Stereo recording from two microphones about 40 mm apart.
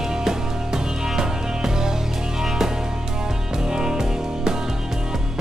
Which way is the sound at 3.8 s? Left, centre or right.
Centre.